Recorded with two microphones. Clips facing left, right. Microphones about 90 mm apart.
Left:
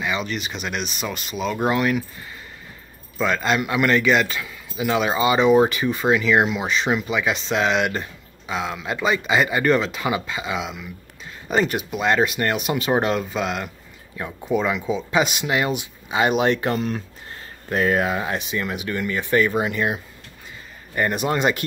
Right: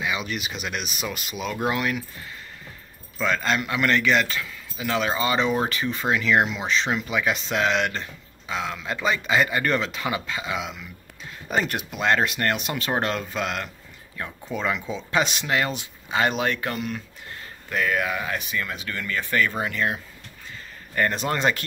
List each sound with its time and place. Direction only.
0.0 s a man's voice: 5° right (ahead or behind)
3.2 s a man's voice: 5° left (ahead or behind)